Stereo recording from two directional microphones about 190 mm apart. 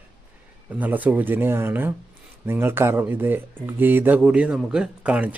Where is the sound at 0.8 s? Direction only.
10° right (ahead or behind).